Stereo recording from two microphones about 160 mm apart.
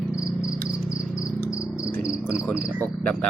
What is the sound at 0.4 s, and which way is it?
Cricket, 20° left (ahead or behind).